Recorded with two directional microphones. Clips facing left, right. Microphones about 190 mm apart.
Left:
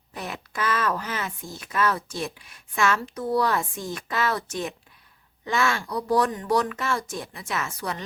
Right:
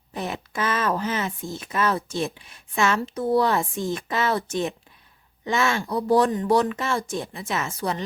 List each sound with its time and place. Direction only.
0.1 s speech: 25° right (ahead or behind)